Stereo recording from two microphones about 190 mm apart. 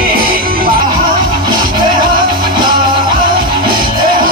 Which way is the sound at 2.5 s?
25° right (ahead or behind).